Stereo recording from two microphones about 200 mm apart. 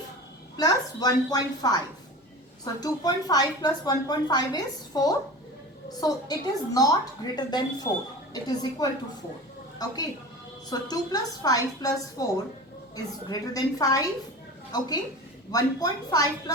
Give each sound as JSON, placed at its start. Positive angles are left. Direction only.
{"t": 0.5, "sound": "a woman's voice", "side_deg": 20}
{"t": 2.8, "sound": "a woman's voice", "side_deg": 20}